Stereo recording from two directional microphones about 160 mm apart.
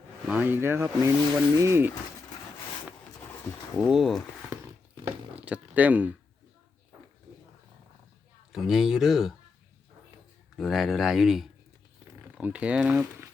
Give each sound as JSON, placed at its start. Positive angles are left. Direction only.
{"t": 0.3, "sound": "speech", "side_deg": -10}
{"t": 3.8, "sound": "speech", "side_deg": -5}
{"t": 5.5, "sound": "speech", "side_deg": -10}
{"t": 8.5, "sound": "speech", "side_deg": 0}
{"t": 10.6, "sound": "speech", "side_deg": 0}